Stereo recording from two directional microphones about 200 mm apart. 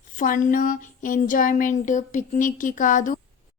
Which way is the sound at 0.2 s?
40° left (ahead or behind).